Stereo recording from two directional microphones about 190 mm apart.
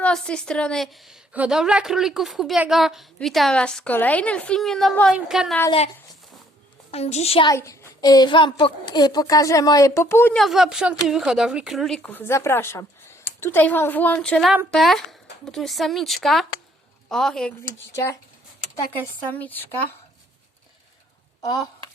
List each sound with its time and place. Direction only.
0.0 s a woman's voice: 5° left (ahead or behind)
6.9 s a child's voice: 35° left (ahead or behind)
7.5 s a child's voice: 15° left (ahead or behind)
10.3 s a woman's voice: centre (ahead or behind)
17.9 s speech: 15° left (ahead or behind)